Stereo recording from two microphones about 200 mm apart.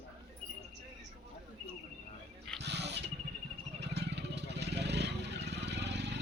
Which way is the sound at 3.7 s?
60° right (ahead or behind).